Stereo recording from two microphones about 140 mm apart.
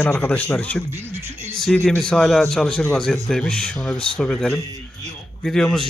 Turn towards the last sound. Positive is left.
turn(degrees=5)  # may be behind; listen again after turning